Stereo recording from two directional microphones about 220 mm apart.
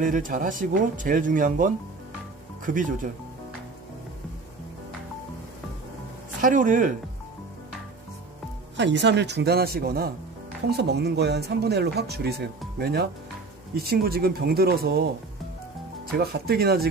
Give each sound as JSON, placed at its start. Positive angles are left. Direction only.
{"t": 0.0, "sound": "speech", "side_deg": -35}
{"t": 6.4, "sound": "speech", "side_deg": -35}
{"t": 8.7, "sound": "speech", "side_deg": -55}
{"t": 16.1, "sound": "speech", "side_deg": -45}